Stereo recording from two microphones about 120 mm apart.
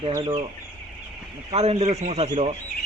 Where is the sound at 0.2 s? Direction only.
35° right (ahead or behind).